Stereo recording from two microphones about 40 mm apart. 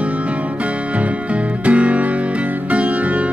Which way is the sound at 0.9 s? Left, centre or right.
Right.